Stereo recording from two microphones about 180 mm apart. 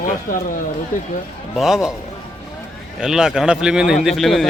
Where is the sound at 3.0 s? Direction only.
5° right (ahead or behind).